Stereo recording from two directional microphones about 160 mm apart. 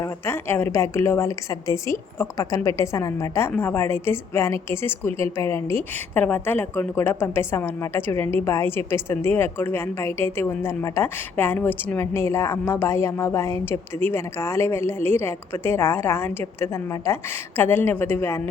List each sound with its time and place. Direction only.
0.0 s a woman's voice: 15° left (ahead or behind)